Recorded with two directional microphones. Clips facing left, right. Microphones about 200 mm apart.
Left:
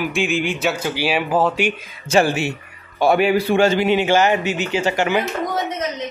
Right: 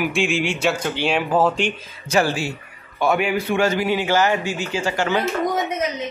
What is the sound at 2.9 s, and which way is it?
A man's voice, 35° left (ahead or behind).